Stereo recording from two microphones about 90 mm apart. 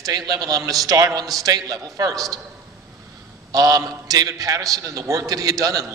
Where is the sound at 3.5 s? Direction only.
40° right (ahead or behind).